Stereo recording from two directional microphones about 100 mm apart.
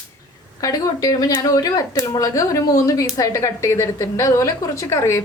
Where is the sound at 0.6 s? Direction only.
35° left (ahead or behind).